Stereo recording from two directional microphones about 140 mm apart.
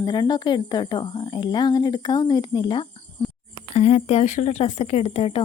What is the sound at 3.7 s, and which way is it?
Speech, 55° left (ahead or behind).